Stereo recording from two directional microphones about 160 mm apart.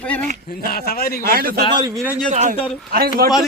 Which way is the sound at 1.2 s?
65° right (ahead or behind).